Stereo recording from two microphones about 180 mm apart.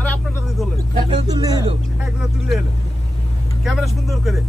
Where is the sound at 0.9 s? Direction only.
20° right (ahead or behind).